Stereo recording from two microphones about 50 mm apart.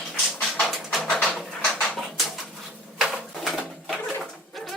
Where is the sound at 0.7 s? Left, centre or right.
Centre.